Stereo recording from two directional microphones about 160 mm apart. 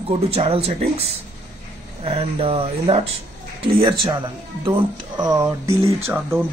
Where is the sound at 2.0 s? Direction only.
35° right (ahead or behind); by 6.2 s 15° right (ahead or behind).